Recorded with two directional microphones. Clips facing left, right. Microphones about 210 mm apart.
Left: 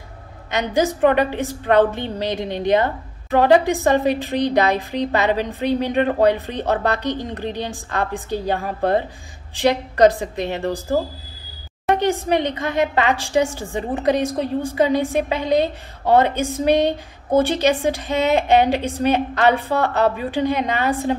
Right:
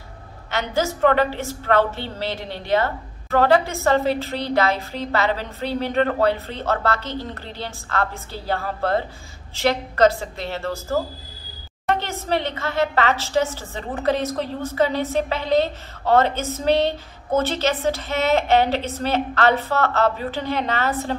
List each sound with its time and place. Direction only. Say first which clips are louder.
0.5 s a woman's voice: left 4 dB; 15° left (ahead or behind)